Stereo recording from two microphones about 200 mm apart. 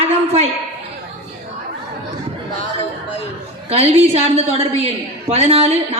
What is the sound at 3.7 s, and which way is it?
A woman's voice, 30° right (ahead or behind).